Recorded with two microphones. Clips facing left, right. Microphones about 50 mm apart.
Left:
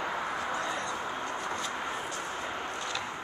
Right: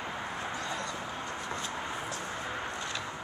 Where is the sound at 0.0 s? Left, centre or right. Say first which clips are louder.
Left 4 dB; left.